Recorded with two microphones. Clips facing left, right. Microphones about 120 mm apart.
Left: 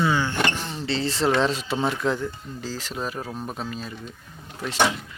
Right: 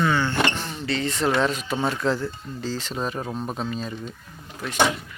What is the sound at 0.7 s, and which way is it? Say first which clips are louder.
Speech: even; 30° left (ahead or behind).